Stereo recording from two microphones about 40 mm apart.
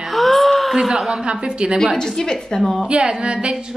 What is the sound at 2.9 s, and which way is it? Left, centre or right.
Speech, right.